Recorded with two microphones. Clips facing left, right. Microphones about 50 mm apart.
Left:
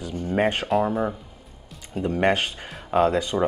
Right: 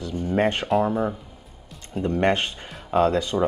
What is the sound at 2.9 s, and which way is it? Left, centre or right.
Speech, left.